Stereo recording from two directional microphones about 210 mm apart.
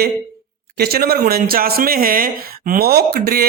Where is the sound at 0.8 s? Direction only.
45° right (ahead or behind).